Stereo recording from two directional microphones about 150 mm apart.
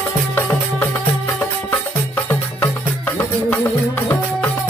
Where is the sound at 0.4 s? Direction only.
15° left (ahead or behind).